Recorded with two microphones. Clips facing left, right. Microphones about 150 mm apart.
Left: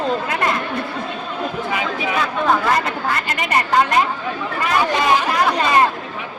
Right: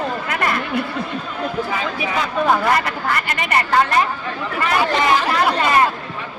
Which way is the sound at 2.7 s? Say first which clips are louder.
Even; 25° left (ahead or behind).